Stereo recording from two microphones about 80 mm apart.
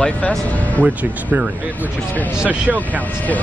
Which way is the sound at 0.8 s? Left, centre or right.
Right.